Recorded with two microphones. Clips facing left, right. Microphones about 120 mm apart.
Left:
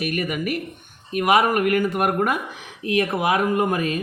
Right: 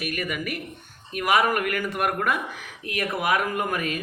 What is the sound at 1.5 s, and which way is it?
Speech, 45° left (ahead or behind).